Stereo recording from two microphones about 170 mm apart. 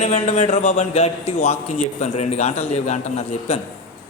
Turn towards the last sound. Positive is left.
turn(degrees=35)  # may be behind; listen again after turning